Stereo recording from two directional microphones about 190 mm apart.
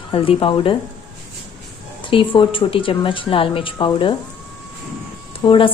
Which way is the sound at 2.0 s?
25° left (ahead or behind).